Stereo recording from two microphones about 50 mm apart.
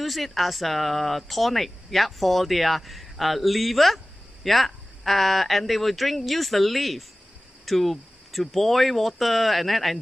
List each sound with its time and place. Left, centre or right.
0.0 s speech: centre